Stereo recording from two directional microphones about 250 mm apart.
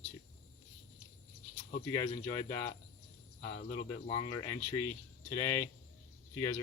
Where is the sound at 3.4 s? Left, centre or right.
Left.